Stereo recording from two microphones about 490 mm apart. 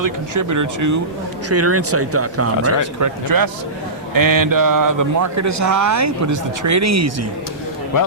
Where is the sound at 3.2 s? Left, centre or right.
Right.